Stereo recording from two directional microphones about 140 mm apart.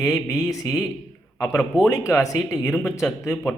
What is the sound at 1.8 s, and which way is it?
Speech, 20° left (ahead or behind).